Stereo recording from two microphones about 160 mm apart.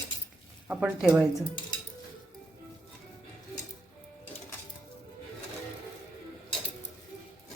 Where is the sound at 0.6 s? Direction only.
5° right (ahead or behind).